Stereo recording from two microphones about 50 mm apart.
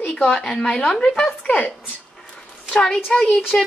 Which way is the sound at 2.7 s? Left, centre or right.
Centre.